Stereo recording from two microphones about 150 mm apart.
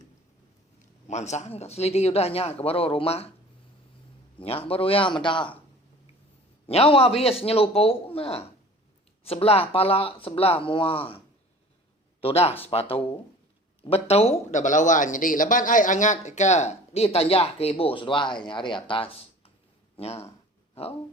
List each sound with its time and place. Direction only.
1.0 s speech: 50° left (ahead or behind)
4.4 s speech: 40° left (ahead or behind)
6.7 s speech: 40° left (ahead or behind)
12.2 s speech: 40° left (ahead or behind)